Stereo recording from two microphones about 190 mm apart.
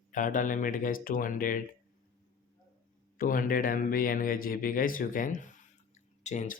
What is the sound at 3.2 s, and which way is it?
Speech, 45° left (ahead or behind).